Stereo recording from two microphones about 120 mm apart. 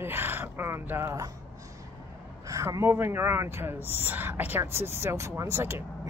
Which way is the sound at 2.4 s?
25° right (ahead or behind).